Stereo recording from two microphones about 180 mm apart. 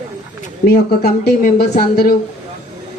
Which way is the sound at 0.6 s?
60° left (ahead or behind).